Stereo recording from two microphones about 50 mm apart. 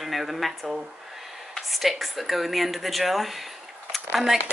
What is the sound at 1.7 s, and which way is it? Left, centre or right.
Speech, centre.